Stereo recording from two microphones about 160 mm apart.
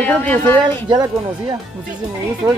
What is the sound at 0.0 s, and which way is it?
Speech, 10° left (ahead or behind).